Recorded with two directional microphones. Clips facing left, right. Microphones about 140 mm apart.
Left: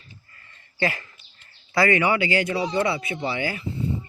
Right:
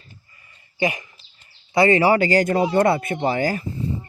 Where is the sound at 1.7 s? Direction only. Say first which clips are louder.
Right 5 dB; 25° right (ahead or behind).